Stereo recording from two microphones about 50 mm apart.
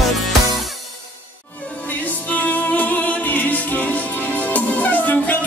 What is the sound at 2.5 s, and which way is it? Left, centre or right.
Music, left.